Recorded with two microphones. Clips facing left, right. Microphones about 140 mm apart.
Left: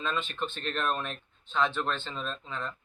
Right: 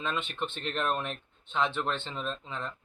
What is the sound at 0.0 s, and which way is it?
Speech, 20° right (ahead or behind).